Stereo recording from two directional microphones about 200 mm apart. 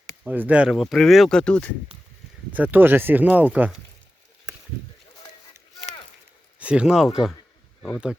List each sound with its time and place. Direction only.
0.3 s speech: 5° right (ahead or behind)
2.5 s speech: 10° right (ahead or behind)
6.6 s speech: 5° right (ahead or behind)